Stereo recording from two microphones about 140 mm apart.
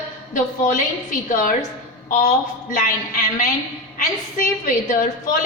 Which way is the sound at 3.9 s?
75° left (ahead or behind).